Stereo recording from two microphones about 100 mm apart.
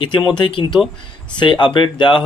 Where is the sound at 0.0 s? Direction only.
50° left (ahead or behind).